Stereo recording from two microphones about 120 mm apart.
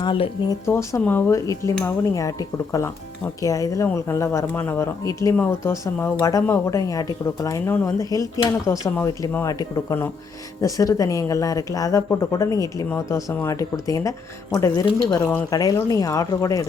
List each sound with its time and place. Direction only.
0.0 s speech: 40° left (ahead or behind)
0.6 s speech: 25° left (ahead or behind)
7.6 s speech: 15° left (ahead or behind)
7.9 s speech: 25° left (ahead or behind)